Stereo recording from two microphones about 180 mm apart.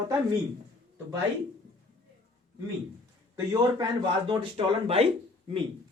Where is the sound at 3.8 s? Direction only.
30° right (ahead or behind).